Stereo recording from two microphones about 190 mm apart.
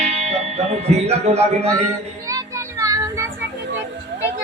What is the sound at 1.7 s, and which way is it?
Child singing, 15° right (ahead or behind).